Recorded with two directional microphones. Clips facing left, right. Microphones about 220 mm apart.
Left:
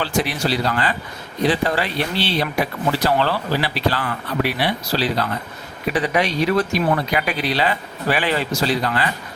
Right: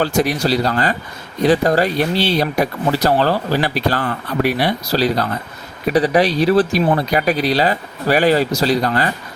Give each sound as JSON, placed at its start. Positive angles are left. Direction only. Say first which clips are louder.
{"t": 0.0, "sound": "speech", "louder": "right 5 dB", "side_deg": -45}